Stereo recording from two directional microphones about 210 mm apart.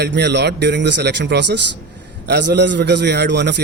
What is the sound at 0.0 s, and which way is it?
A man's voice, 55° right (ahead or behind).